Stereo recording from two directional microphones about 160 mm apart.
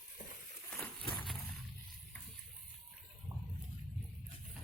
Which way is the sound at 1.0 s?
30° left (ahead or behind).